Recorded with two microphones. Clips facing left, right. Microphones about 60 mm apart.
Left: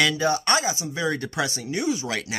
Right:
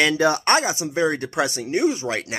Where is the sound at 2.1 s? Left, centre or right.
Right.